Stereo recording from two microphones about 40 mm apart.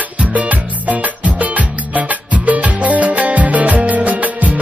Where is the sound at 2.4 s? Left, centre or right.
Right.